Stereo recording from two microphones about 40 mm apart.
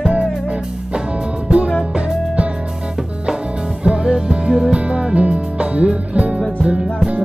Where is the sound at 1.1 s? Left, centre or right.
Right.